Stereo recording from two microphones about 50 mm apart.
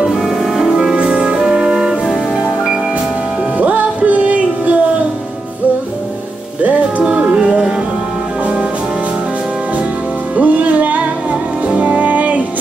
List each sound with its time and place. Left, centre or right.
0.2 s music: centre
3.5 s music: right
6.6 s music: right
10.3 s music: right